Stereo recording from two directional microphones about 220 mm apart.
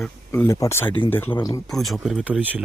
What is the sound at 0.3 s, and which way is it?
Speech, 10° left (ahead or behind).